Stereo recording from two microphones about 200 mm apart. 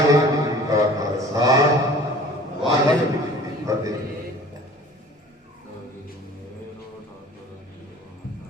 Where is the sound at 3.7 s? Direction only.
15° right (ahead or behind).